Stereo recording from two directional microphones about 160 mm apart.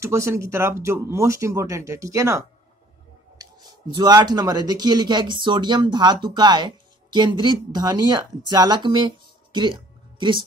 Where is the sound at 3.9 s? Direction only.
25° right (ahead or behind).